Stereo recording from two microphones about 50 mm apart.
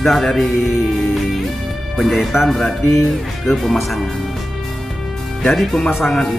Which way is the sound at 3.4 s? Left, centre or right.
Centre.